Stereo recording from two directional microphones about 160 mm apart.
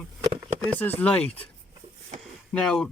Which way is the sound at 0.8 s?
10° left (ahead or behind).